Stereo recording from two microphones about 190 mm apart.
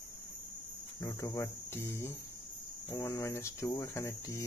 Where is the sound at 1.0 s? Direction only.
15° left (ahead or behind).